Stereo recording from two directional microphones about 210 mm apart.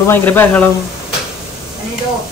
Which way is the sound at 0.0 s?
10° left (ahead or behind).